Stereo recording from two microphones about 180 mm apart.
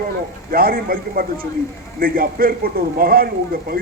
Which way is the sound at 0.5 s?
55° right (ahead or behind).